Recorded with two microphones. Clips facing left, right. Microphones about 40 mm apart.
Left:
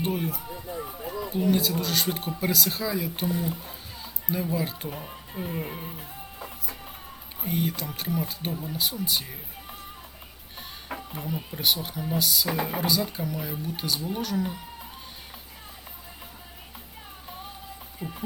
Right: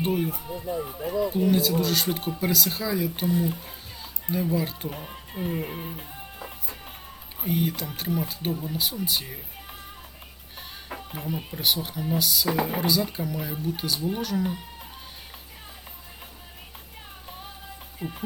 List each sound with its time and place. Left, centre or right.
0.0 s speech: centre
4.9 s music: centre
7.4 s speech: centre
11.5 s speech: centre
18.0 s music: right